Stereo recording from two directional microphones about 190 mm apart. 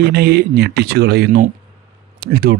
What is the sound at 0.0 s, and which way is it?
Speech, 55° right (ahead or behind).